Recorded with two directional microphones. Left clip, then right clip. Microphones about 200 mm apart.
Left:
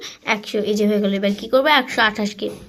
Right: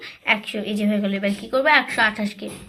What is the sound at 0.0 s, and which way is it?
A woman's voice, 50° left (ahead or behind).